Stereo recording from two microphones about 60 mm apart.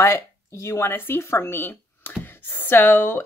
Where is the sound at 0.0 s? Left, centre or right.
Left.